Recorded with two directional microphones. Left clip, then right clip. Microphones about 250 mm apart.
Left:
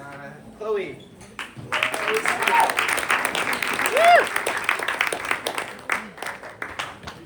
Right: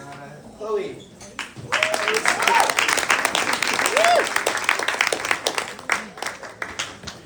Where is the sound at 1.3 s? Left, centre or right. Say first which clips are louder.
Right 3 dB; right.